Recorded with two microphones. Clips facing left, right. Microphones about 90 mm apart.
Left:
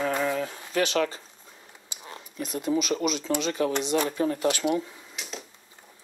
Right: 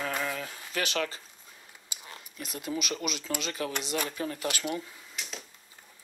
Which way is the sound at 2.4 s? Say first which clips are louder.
Left 8 dB; 5° right (ahead or behind).